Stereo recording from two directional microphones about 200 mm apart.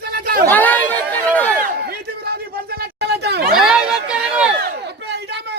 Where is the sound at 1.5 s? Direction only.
50° right (ahead or behind).